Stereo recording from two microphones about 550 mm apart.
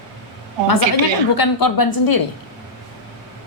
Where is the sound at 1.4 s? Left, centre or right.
Left.